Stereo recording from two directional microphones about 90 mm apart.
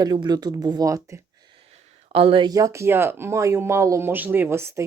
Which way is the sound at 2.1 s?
90° right.